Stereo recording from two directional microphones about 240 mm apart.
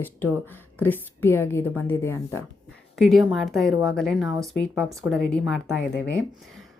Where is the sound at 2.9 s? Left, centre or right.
Centre.